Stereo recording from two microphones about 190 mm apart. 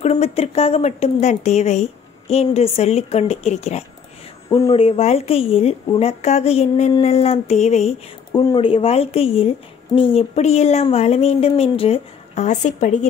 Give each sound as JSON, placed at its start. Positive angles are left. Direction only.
{"t": 0.0, "sound": "speech", "side_deg": 35}